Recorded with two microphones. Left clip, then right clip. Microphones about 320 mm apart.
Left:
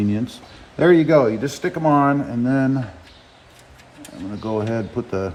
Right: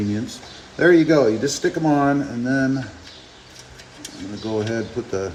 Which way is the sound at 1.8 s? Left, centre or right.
Left.